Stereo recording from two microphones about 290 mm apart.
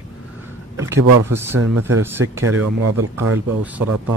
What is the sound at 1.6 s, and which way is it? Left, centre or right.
Speech, right.